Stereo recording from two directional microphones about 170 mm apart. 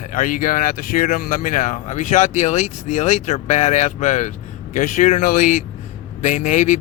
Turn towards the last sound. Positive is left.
turn(degrees=45)  # may be behind; listen again after turning